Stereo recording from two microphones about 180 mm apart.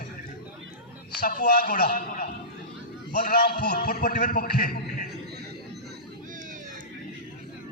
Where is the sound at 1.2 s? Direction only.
55° left (ahead or behind).